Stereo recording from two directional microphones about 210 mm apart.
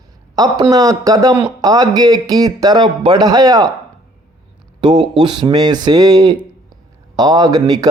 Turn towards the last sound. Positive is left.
turn(degrees=-20)  # may be behind; listen again after turning